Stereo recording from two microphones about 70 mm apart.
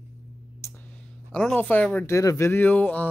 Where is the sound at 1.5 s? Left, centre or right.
Left.